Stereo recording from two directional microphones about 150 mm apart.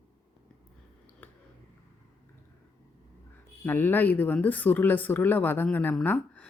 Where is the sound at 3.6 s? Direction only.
10° left (ahead or behind).